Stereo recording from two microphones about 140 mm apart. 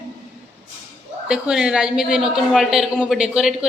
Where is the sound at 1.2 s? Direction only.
5° right (ahead or behind).